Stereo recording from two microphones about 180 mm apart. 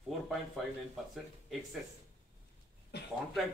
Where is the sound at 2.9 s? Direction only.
70° left (ahead or behind).